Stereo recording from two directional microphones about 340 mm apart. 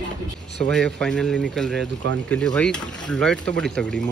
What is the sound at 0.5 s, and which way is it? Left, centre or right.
Speech, centre.